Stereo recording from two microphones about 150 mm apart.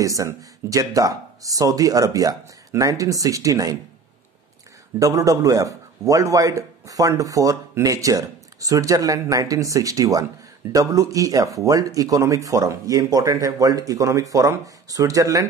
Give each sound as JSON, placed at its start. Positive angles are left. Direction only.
{"t": 0.0, "sound": "a man's voice", "side_deg": -20}
{"t": 4.9, "sound": "a man's voice", "side_deg": -20}